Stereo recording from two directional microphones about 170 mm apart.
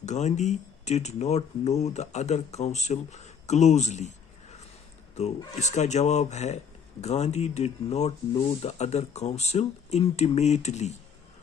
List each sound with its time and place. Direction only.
0.0 s speech: 45° left (ahead or behind)